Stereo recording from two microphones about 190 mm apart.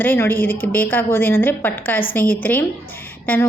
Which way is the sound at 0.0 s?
10° left (ahead or behind).